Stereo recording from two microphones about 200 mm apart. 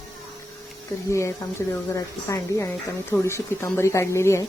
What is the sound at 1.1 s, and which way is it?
Speech, 15° left (ahead or behind).